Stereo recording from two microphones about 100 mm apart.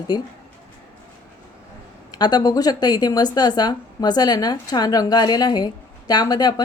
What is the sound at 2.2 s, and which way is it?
A woman's voice, 45° left (ahead or behind).